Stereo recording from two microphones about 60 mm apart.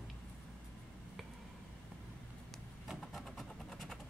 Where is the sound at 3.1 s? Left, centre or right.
Centre.